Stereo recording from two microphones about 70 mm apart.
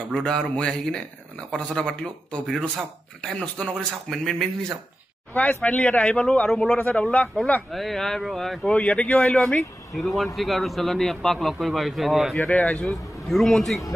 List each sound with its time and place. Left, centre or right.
0.1 s speech: centre
3.3 s speech: centre
5.3 s speech: left
7.7 s a man's voice: centre
8.6 s speech: centre
9.9 s a man's voice: centre
12.4 s speech: centre
12.8 s a man's voice: centre